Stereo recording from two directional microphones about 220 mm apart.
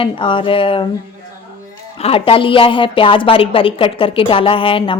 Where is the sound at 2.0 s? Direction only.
25° left (ahead or behind).